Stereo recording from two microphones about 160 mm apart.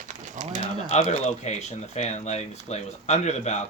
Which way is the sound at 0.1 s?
45° right (ahead or behind).